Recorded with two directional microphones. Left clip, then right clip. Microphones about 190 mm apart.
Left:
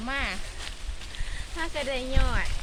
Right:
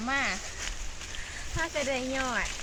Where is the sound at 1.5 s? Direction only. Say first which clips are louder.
Even; 15° left (ahead or behind).